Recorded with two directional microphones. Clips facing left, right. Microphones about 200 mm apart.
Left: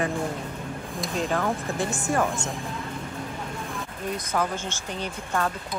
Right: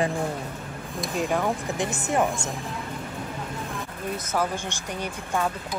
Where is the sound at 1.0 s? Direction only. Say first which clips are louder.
Right 1 dB; 10° right (ahead or behind).